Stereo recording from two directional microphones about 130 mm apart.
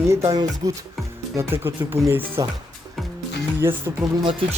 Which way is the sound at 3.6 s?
20° right (ahead or behind).